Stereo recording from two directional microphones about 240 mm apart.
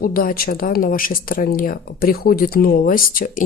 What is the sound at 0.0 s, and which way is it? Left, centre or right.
Speech, left.